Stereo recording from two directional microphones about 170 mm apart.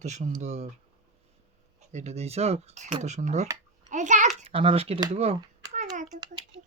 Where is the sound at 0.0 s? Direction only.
45° right (ahead or behind).